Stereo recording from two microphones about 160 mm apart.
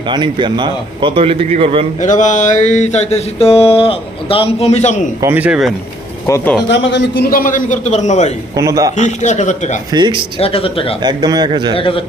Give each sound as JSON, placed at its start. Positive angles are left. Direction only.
{"t": 0.1, "sound": "a man's voice", "side_deg": -30}
{"t": 2.0, "sound": "mantra", "side_deg": 50}
{"t": 5.2, "sound": "speech", "side_deg": -10}
{"t": 6.2, "sound": "speech", "side_deg": 20}
{"t": 6.7, "sound": "a man's voice", "side_deg": 90}
{"t": 8.5, "sound": "a man's voice", "side_deg": -20}
{"t": 9.0, "sound": "mantra", "side_deg": 45}
{"t": 9.9, "sound": "a man's voice", "side_deg": -30}
{"t": 10.4, "sound": "speech", "side_deg": 35}
{"t": 11.0, "sound": "a man's voice", "side_deg": -25}
{"t": 11.8, "sound": "speech", "side_deg": 35}